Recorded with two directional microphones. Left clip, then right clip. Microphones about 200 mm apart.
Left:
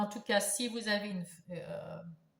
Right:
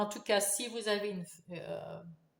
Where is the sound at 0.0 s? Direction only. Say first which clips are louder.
Right 1 dB; 35° right (ahead or behind).